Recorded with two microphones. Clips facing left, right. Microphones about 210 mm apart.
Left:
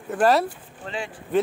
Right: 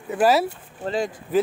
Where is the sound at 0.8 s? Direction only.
40° right (ahead or behind).